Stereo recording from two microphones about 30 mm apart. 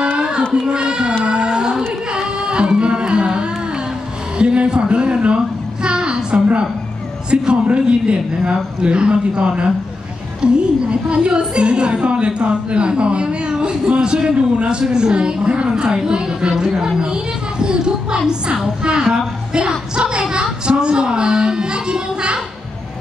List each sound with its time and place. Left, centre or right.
0.5 s a woman's voice: right
1.2 s music: right
4.4 s a woman's voice: right
5.9 s a sound: right
7.6 s a woman's voice: right
14.8 s a woman's voice: right
16.0 s a woman's voice: right
19.5 s a sound: right
20.6 s a child's voice: right